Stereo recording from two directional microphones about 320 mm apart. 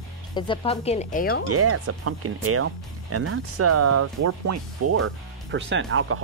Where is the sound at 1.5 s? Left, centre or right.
Right.